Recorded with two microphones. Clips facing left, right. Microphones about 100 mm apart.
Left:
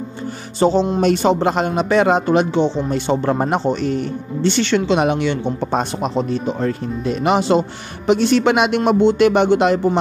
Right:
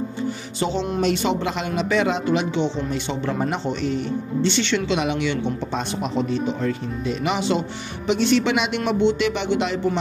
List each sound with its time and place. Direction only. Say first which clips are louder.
0.6 s music: left 10 dB; 40° left (ahead or behind)
1.0 s speech: left 5 dB; 40° left (ahead or behind)